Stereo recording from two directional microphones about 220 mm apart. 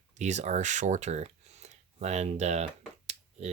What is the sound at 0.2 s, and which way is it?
Speech, 30° right (ahead or behind).